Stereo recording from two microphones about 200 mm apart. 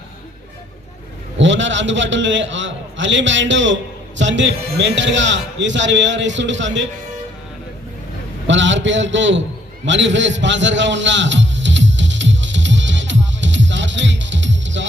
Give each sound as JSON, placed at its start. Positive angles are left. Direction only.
{"t": 1.4, "sound": "a man's voice", "side_deg": -65}
{"t": 8.4, "sound": "a man's voice", "side_deg": -65}
{"t": 9.8, "sound": "a sound", "side_deg": -65}